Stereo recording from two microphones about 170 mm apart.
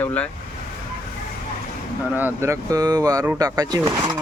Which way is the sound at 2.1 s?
15° right (ahead or behind).